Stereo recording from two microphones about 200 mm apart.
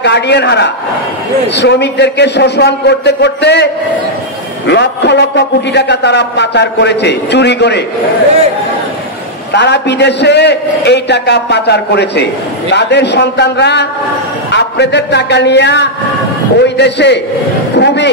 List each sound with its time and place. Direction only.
0.0 s a man's voice: 60° left (ahead or behind)
9.5 s a man's voice: 60° left (ahead or behind)